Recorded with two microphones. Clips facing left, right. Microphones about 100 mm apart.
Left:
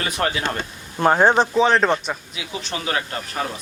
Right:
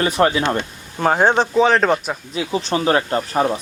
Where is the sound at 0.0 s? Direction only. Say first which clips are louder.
Right 7 dB; 30° right (ahead or behind).